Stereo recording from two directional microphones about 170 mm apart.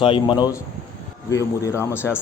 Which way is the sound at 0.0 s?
30° left (ahead or behind).